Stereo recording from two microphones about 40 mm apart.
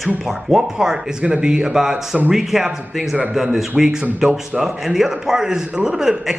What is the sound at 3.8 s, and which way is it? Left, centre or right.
A man's voice, centre.